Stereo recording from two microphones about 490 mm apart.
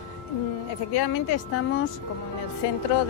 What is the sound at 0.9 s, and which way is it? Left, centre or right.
Speech, left.